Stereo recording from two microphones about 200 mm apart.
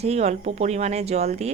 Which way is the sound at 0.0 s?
35° right (ahead or behind).